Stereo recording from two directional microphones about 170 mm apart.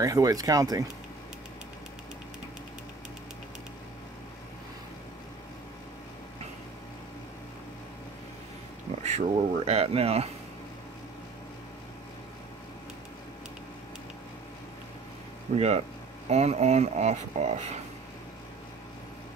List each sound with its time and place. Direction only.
0.0 s speech: 20° right (ahead or behind)
9.0 s speech: 40° right (ahead or behind)
15.5 s speech: 40° right (ahead or behind)